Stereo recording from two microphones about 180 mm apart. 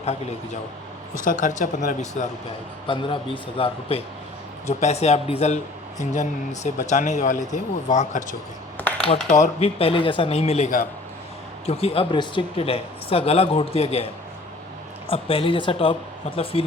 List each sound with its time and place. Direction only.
0.0 s speech: 35° left (ahead or behind)
2.8 s a man's voice: 30° left (ahead or behind)